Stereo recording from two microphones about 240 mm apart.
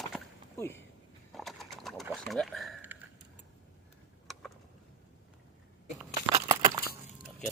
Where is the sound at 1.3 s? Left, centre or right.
Centre.